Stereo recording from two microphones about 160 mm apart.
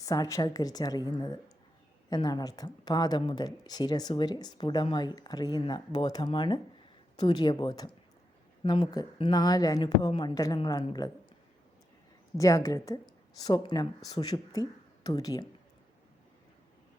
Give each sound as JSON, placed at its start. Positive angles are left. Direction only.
{"t": 0.0, "sound": "speech", "side_deg": 20}
{"t": 12.4, "sound": "speech", "side_deg": 20}